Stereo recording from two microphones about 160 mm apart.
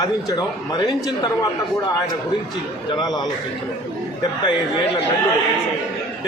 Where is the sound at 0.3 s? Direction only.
25° left (ahead or behind).